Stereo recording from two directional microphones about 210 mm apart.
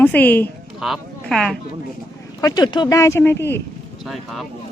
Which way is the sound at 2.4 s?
20° left (ahead or behind).